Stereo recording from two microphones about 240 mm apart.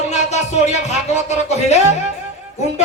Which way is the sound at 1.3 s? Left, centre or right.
Left.